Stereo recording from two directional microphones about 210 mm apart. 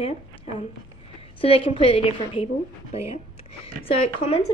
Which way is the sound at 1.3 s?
25° left (ahead or behind).